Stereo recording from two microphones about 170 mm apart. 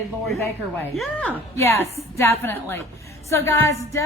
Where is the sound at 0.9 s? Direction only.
10° left (ahead or behind).